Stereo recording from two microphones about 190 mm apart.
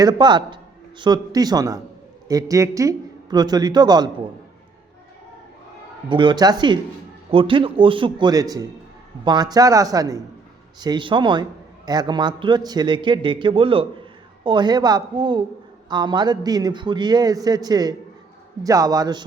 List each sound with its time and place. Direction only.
0.0 s a man's voice: 25° right (ahead or behind)
6.1 s a man's voice: 25° right (ahead or behind)